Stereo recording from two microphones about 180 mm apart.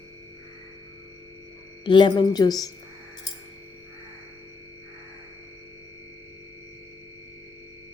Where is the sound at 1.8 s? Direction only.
25° left (ahead or behind).